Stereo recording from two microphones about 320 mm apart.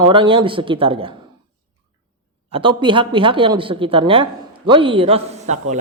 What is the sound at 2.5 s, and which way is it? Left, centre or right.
A man's voice, centre.